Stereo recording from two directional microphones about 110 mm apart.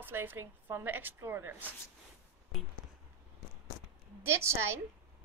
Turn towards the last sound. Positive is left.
turn(degrees=-25)  # may be behind; listen again after turning